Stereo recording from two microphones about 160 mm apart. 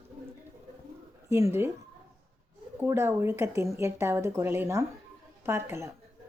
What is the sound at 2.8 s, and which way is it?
Speech, 15° right (ahead or behind).